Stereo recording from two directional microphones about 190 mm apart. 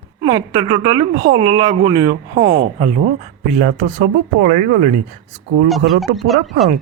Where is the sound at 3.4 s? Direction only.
40° right (ahead or behind).